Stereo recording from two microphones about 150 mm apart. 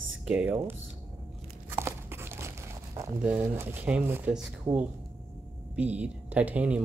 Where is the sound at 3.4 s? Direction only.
15° right (ahead or behind).